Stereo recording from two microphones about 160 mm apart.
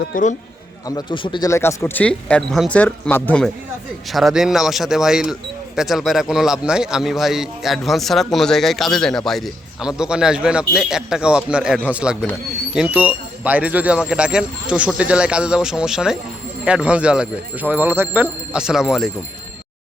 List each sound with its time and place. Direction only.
0.1 s a man's voice: 50° left (ahead or behind)
0.9 s a man's voice: 30° left (ahead or behind)
1.5 s speech: 15° left (ahead or behind); by 19.1 s centre (ahead or behind)